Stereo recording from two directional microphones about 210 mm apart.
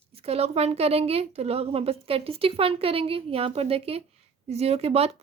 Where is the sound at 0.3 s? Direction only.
30° right (ahead or behind).